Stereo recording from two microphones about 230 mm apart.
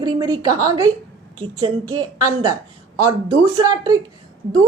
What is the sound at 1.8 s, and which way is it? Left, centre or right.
Speech, right.